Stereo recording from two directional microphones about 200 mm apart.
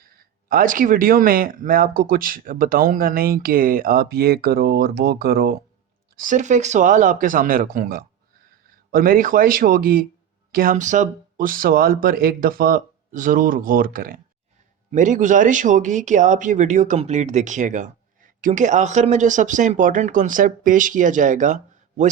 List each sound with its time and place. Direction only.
0.4 s speech: 45° right (ahead or behind)
6.1 s speech: 40° right (ahead or behind)